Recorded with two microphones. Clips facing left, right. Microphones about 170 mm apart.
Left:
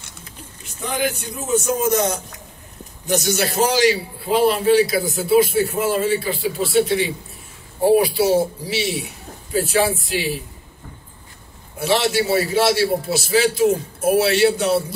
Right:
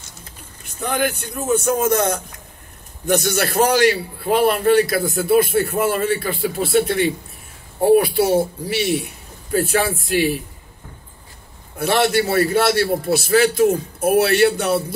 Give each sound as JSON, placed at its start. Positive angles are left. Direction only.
{"t": 0.7, "sound": "a man's voice", "side_deg": -55}
{"t": 11.8, "sound": "a man's voice", "side_deg": -55}